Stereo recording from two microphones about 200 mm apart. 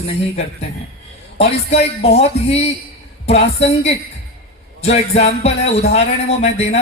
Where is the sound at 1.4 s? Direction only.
30° left (ahead or behind).